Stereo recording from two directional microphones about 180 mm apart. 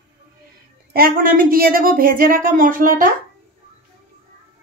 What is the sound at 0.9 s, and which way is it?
A woman's voice, 55° right (ahead or behind).